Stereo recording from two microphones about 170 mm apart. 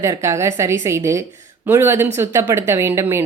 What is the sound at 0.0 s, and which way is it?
A woman's voice, 15° right (ahead or behind).